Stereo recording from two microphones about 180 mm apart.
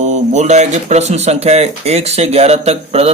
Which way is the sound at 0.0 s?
40° right (ahead or behind).